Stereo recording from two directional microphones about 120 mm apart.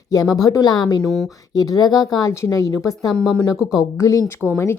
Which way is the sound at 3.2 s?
5° left (ahead or behind).